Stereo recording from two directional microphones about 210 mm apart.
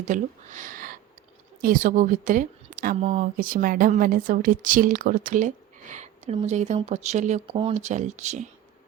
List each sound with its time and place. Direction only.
0.0 s speech: 35° right (ahead or behind)